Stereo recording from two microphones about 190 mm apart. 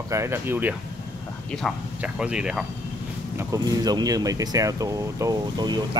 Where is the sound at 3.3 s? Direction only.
20° right (ahead or behind).